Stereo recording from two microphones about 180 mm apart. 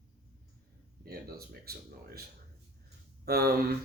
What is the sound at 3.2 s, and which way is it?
Speech, 60° right (ahead or behind).